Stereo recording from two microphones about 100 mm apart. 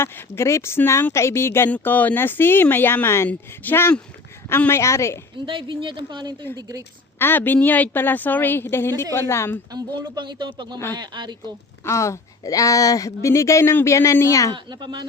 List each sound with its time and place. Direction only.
0.0 s a woman's voice: 25° left (ahead or behind)
5.5 s a woman's voice: 55° right (ahead or behind)
6.6 s a woman's voice: 35° right (ahead or behind)
7.2 s a woman's voice: 20° left (ahead or behind)
9.7 s speech: 45° right (ahead or behind)
11.9 s a woman's voice: 30° left (ahead or behind)
14.5 s speech: 50° right (ahead or behind)